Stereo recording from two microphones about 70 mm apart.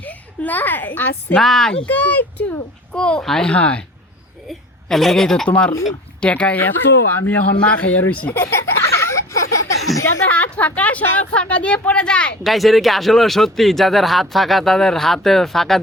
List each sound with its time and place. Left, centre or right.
0.0 s a woman's voice: left
1.4 s speech: centre
1.9 s speech: left
2.9 s speech: centre
4.4 s a woman's voice: centre; by 8.3 s left
8.3 s speech: left
9.1 s a sound: left
10.2 s a sound: left
11.3 s speech: centre
12.4 s speech: centre